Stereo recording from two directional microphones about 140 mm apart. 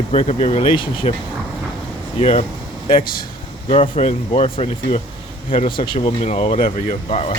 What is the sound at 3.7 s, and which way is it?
Speech, 45° left (ahead or behind).